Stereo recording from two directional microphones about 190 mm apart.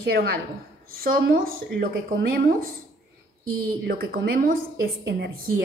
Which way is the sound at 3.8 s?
55° right (ahead or behind).